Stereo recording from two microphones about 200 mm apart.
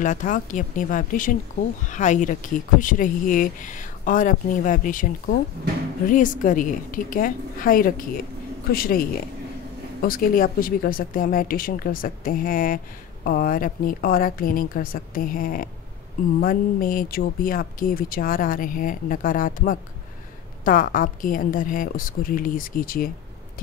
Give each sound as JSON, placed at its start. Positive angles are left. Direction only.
{"t": 0.0, "sound": "speech", "side_deg": 40}